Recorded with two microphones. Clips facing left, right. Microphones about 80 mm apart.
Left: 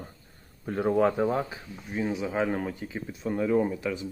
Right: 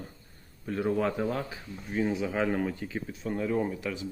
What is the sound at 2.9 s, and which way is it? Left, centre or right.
Speech, left.